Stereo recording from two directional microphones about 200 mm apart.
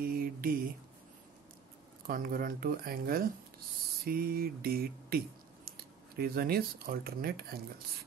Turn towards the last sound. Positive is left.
turn(degrees=-50)  # may be behind; listen again after turning